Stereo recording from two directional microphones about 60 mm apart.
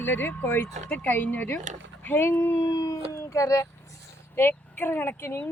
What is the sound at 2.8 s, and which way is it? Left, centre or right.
Speech, left.